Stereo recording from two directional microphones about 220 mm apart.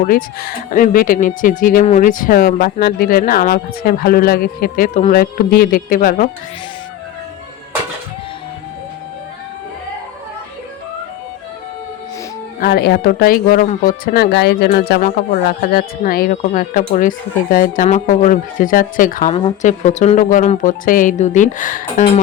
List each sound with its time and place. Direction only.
0.0 s speech: 40° left (ahead or behind)
12.5 s speech: 45° left (ahead or behind)